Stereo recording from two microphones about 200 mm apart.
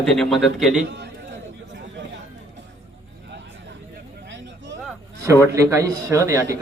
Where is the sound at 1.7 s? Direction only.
65° right (ahead or behind).